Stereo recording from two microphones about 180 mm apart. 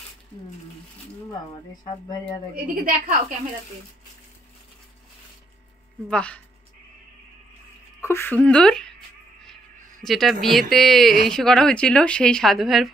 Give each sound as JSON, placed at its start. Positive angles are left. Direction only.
{"t": 2.5, "sound": "a woman's voice", "side_deg": -50}
{"t": 6.0, "sound": "speech", "side_deg": 5}
{"t": 8.0, "sound": "a woman's voice", "side_deg": 15}
{"t": 10.0, "sound": "speech", "side_deg": 0}